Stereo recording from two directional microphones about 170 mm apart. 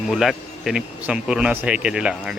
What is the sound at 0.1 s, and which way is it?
Speech, centre (ahead or behind).